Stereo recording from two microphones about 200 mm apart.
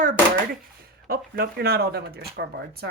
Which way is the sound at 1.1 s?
50° right (ahead or behind).